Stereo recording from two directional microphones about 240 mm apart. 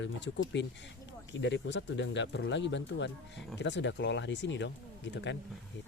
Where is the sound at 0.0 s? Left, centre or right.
Left.